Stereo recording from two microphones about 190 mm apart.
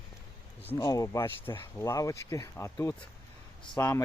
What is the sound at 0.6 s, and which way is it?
Speech, 15° left (ahead or behind).